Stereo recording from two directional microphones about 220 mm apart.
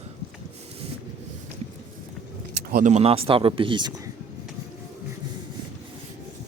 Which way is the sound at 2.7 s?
35° right (ahead or behind).